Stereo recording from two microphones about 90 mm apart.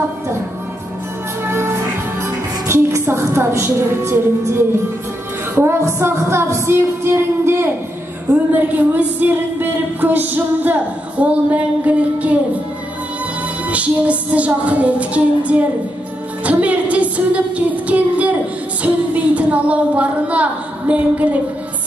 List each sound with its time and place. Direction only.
1.4 s music: 25° right (ahead or behind)
2.2 s a woman's voice: 30° right (ahead or behind)
13.7 s music: 15° right (ahead or behind)
16.4 s child singing: 15° right (ahead or behind)
18.8 s a woman's voice: 15° right (ahead or behind)